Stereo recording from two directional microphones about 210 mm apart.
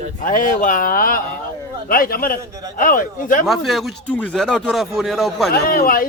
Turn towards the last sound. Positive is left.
turn(degrees=45)  # may be behind; listen again after turning